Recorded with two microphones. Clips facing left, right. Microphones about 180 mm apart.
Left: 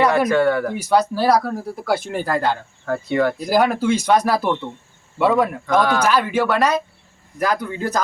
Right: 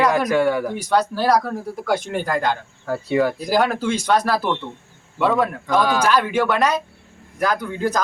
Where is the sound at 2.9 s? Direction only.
10° right (ahead or behind).